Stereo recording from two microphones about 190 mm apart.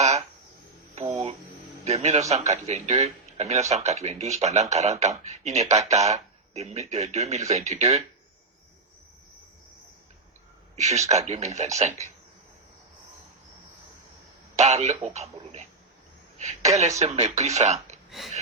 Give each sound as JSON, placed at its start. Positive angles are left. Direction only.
{"t": 0.9, "sound": "a sound", "side_deg": -35}
{"t": 1.8, "sound": "a man's voice", "side_deg": -35}
{"t": 10.8, "sound": "a man's voice", "side_deg": -35}
{"t": 14.5, "sound": "a man's voice", "side_deg": -35}
{"t": 17.0, "sound": "a man's voice", "side_deg": -35}
{"t": 18.1, "sound": "a sound", "side_deg": 0}